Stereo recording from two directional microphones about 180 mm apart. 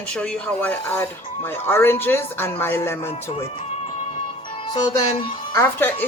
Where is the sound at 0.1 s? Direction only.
5° left (ahead or behind).